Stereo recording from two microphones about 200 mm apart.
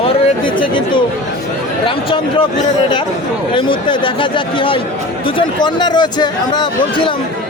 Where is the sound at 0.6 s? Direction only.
25° left (ahead or behind).